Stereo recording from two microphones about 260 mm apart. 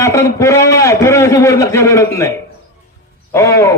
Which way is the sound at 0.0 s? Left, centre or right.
Centre.